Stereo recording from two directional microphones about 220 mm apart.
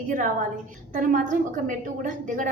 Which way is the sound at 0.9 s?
35° right (ahead or behind).